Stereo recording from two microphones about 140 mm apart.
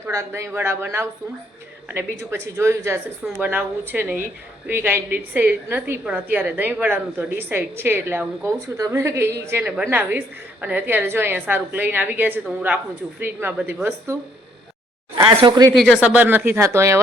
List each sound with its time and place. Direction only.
0.1 s speech: 20° right (ahead or behind)
15.2 s speech: 30° right (ahead or behind)
15.7 s speech: 5° left (ahead or behind)
16.0 s speech: 10° right (ahead or behind)